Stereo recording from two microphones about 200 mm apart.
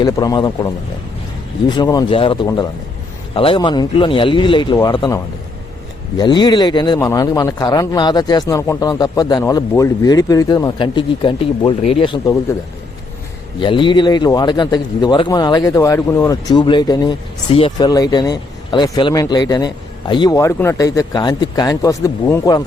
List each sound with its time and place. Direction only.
0.0 s a man's voice: 20° left (ahead or behind)
13.6 s a man's voice: 25° left (ahead or behind)